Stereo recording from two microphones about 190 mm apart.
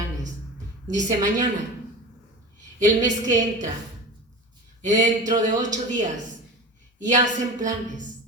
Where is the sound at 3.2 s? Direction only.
40° right (ahead or behind).